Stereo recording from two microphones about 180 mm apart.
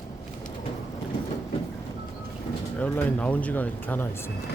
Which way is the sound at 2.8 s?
10° left (ahead or behind).